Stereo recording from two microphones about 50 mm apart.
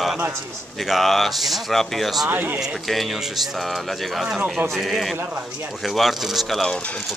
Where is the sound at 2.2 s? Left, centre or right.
Right.